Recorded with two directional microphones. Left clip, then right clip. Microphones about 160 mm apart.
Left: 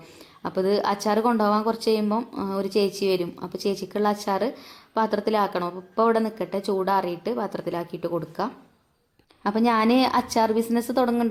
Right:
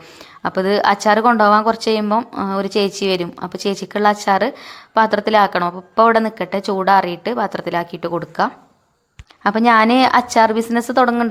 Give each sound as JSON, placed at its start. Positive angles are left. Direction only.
{"t": 0.4, "sound": "speech", "side_deg": -15}